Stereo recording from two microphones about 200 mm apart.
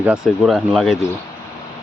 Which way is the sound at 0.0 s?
5° right (ahead or behind).